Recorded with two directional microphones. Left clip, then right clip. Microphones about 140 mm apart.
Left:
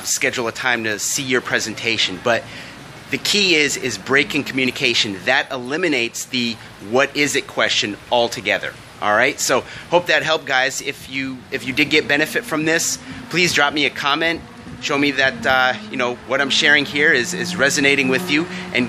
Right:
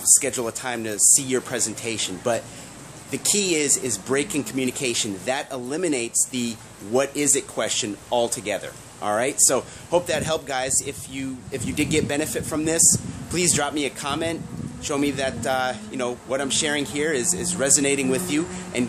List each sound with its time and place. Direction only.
0.0 s speech: 15° right (ahead or behind)